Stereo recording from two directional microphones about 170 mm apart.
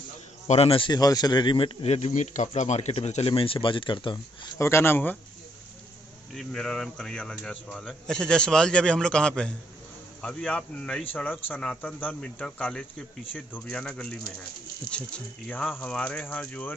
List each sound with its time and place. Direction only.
0.5 s speech: 35° left (ahead or behind)
4.6 s speech: 15° left (ahead or behind)
6.3 s a man's voice: 5° left (ahead or behind)